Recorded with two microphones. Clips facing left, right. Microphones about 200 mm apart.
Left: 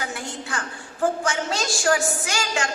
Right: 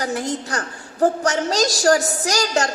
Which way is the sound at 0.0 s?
40° right (ahead or behind).